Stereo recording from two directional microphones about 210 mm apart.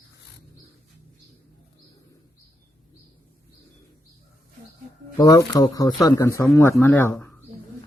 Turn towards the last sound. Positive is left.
turn(degrees=10)  # may be behind; listen again after turning